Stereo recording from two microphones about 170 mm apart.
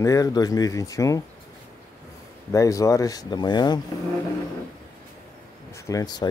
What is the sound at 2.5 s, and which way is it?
Speech, 20° left (ahead or behind).